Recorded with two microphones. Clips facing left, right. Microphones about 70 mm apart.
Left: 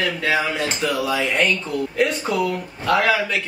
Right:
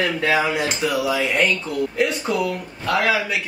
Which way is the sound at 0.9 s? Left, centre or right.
Centre.